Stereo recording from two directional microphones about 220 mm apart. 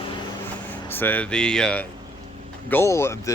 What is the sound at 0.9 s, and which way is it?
Speech, 10° left (ahead or behind).